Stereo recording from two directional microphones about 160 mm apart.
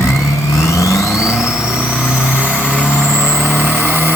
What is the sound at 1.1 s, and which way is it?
Music, 5° right (ahead or behind).